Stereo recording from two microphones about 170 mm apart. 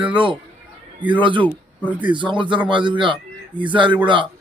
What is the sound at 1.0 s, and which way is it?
Speech, 10° right (ahead or behind).